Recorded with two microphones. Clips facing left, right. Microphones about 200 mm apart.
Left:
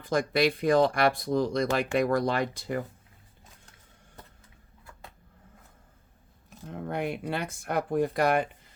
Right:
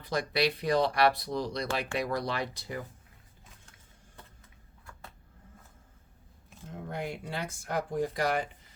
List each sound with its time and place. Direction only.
0.0 s speech: 50° left (ahead or behind)
6.7 s speech: 65° left (ahead or behind)